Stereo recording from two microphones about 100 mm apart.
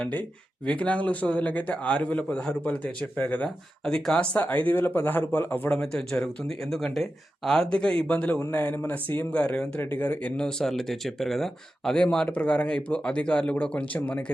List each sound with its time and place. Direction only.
0.0 s speech: 15° left (ahead or behind)
3.8 s speech: 5° left (ahead or behind)
5.8 s speech: 5° left (ahead or behind)